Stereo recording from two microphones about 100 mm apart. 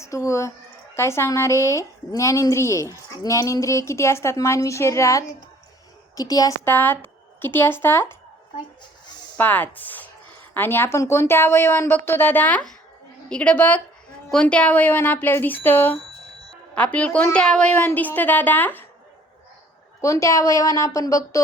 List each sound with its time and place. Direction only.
0.0 s a woman's voice: 30° left (ahead or behind)
6.7 s speech: 20° left (ahead or behind)
9.4 s a woman's voice: 15° left (ahead or behind)
20.0 s a woman's voice: 30° left (ahead or behind)